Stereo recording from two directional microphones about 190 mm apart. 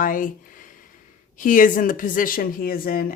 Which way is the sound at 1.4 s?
45° left (ahead or behind).